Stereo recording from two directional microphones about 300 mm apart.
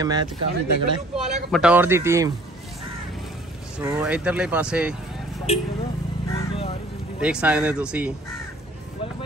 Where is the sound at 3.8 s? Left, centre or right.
Centre.